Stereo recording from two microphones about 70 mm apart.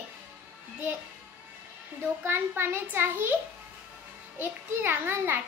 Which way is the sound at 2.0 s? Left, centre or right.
Right.